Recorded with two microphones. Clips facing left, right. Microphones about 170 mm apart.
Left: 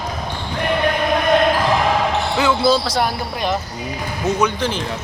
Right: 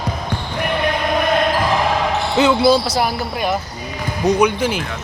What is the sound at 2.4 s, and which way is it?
Speech, 15° right (ahead or behind).